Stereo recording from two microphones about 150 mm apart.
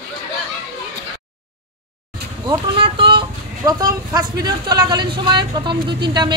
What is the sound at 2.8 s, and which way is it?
Vehicle, 35° right (ahead or behind).